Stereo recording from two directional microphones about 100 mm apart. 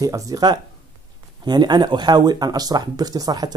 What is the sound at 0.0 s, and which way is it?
Speech, 35° right (ahead or behind).